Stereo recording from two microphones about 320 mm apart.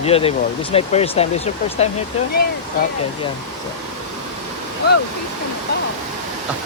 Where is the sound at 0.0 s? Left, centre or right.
Centre.